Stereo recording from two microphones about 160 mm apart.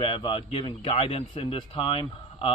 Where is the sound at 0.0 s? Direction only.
35° left (ahead or behind).